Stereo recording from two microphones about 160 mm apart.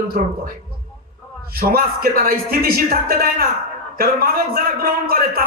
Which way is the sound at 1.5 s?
70° right (ahead or behind).